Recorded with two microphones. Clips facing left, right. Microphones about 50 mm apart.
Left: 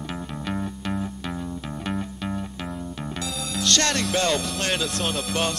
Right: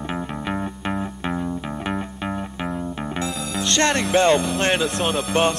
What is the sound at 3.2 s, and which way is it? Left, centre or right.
Music, right.